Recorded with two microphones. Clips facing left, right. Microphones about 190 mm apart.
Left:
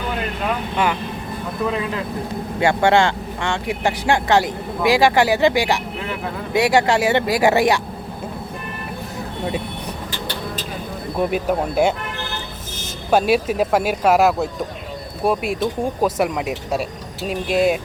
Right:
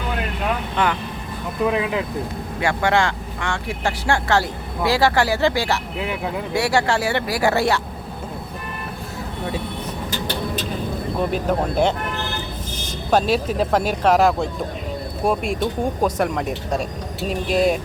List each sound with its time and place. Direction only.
0.8 s speech: 10° left (ahead or behind)
1.6 s speech: 15° right (ahead or behind)
2.6 s speech: 25° left (ahead or behind)
11.2 s speech: 10° left (ahead or behind)
13.1 s speech: 10° left (ahead or behind)